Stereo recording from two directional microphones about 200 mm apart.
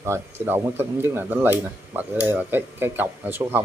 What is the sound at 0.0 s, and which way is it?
Speech, 10° right (ahead or behind).